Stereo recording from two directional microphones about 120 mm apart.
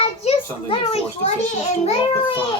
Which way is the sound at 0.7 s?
55° left (ahead or behind).